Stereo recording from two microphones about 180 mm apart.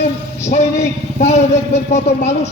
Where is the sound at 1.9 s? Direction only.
40° left (ahead or behind).